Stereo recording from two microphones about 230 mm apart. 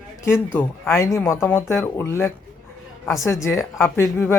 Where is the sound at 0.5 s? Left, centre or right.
Centre.